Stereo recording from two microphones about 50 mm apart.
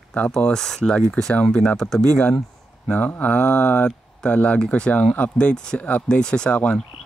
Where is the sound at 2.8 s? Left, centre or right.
Left.